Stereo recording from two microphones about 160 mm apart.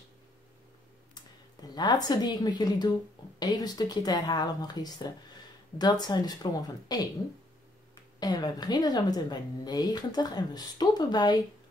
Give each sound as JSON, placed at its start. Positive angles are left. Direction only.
{"t": 1.1, "sound": "a woman's voice", "side_deg": 25}
{"t": 8.2, "sound": "speech", "side_deg": 25}